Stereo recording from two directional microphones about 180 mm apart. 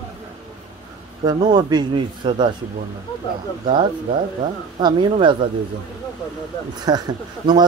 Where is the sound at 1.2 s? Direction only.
20° right (ahead or behind).